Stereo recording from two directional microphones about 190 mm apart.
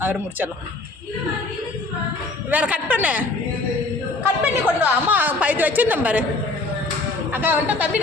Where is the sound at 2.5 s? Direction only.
5° right (ahead or behind).